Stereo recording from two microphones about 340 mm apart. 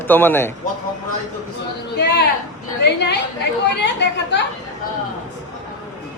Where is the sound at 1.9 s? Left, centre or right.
Left.